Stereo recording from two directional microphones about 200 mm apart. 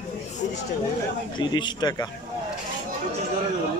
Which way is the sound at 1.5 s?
20° left (ahead or behind).